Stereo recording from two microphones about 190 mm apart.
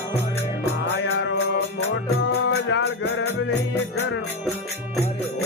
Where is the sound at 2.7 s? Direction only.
65° left (ahead or behind).